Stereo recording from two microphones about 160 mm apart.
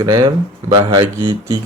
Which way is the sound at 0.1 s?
30° right (ahead or behind).